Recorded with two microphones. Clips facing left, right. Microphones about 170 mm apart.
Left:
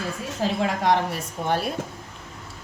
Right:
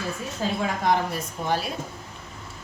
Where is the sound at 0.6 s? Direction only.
75° left (ahead or behind).